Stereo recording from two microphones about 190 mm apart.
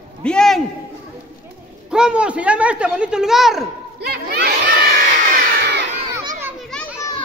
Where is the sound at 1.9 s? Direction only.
5° right (ahead or behind).